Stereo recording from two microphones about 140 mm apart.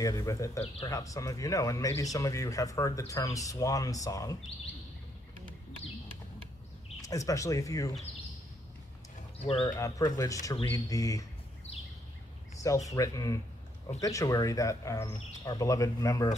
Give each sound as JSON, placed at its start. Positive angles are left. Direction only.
{"t": 0.0, "sound": "speech", "side_deg": 25}
{"t": 7.0, "sound": "speech", "side_deg": 25}
{"t": 9.4, "sound": "speech", "side_deg": 40}
{"t": 9.8, "sound": "speech", "side_deg": 25}
{"t": 12.6, "sound": "speech", "side_deg": 25}